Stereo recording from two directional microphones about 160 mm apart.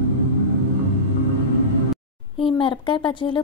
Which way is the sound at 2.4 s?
30° left (ahead or behind).